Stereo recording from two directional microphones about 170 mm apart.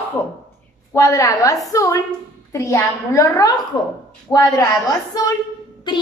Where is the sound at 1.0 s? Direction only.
20° left (ahead or behind).